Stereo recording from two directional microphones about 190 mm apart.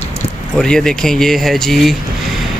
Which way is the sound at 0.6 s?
5° left (ahead or behind).